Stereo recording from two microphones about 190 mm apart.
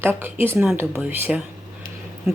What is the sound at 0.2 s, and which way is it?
Speech, 10° right (ahead or behind).